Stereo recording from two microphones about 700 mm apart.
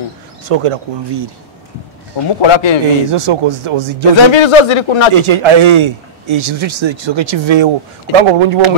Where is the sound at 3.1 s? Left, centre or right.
Right.